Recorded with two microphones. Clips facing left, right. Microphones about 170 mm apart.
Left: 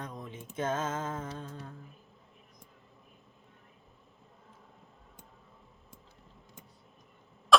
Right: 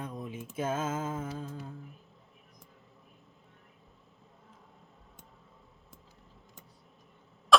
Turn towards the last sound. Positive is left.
turn(degrees=0)  # may be behind; listen again after turning